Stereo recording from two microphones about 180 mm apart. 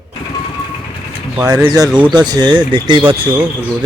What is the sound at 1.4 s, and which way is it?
Speech, 20° right (ahead or behind).